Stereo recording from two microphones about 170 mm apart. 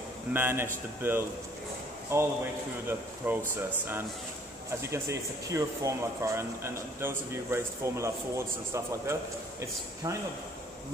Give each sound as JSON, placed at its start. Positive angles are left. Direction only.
{"t": 0.3, "sound": "speech", "side_deg": -15}
{"t": 4.9, "sound": "speech", "side_deg": -15}